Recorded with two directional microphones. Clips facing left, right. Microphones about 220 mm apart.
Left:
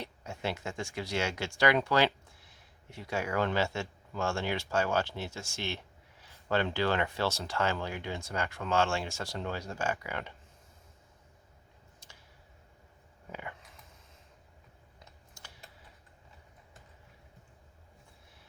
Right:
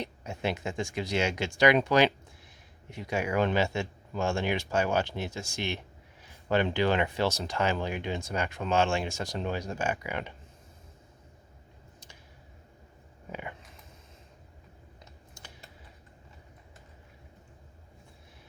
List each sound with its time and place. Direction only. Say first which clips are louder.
0.0 s speech: right 4 dB; 15° right (ahead or behind)
13.3 s a sound: right 3 dB; 20° right (ahead or behind)
15.4 s typing: right 3 dB; 20° right (ahead or behind)